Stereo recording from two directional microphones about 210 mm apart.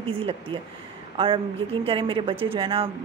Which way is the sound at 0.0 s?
25° right (ahead or behind).